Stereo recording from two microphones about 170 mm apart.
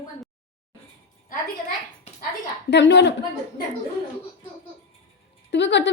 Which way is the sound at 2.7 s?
90° left.